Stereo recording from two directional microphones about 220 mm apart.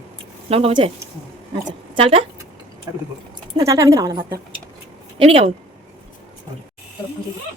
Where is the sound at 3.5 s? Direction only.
15° right (ahead or behind).